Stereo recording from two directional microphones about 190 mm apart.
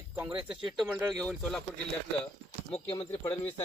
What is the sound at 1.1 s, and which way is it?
Speech, centre (ahead or behind).